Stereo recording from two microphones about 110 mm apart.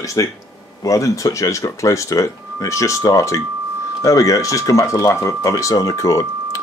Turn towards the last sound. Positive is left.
turn(degrees=30)  # may be behind; listen again after turning